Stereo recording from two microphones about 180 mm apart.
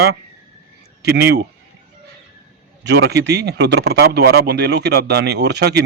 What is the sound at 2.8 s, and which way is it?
Speech, 70° right (ahead or behind).